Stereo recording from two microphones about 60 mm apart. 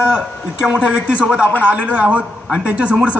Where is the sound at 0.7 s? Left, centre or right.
Centre.